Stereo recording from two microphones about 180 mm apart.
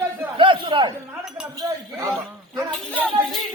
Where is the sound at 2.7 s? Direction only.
5° left (ahead or behind).